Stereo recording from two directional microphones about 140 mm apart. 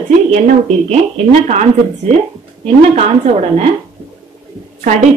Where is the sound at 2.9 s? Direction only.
50° right (ahead or behind).